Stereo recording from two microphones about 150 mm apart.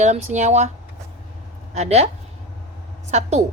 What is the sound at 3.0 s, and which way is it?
Speech, 50° right (ahead or behind).